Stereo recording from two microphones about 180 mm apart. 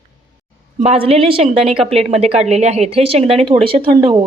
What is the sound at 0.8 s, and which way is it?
Speech, 35° right (ahead or behind).